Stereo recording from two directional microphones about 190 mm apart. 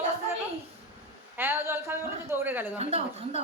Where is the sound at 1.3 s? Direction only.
10° right (ahead or behind).